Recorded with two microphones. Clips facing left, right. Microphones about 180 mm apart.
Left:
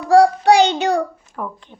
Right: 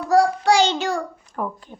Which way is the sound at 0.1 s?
65° left (ahead or behind).